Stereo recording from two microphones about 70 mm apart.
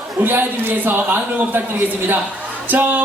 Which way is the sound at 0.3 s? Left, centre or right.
Right.